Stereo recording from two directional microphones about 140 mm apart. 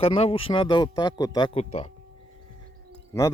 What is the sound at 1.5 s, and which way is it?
Speech, 45° left (ahead or behind).